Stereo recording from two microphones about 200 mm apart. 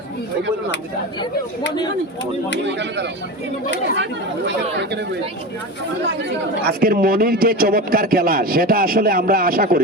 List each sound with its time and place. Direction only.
2.7 s speech: 60° right (ahead or behind)
6.2 s speech: 50° right (ahead or behind)